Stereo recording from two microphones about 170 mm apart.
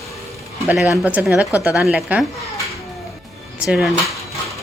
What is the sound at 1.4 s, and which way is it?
Speech, 20° left (ahead or behind).